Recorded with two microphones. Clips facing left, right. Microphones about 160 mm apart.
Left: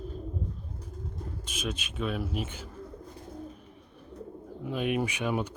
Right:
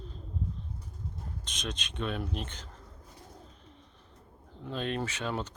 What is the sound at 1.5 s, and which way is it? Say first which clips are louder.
Speech: left 4 dB; 5° left (ahead or behind).